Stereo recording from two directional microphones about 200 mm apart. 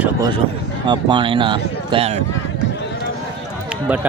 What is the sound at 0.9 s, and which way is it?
Speech, 25° right (ahead or behind).